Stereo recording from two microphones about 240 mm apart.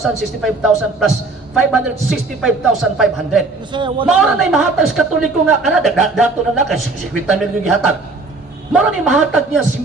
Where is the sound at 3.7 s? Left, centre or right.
Centre.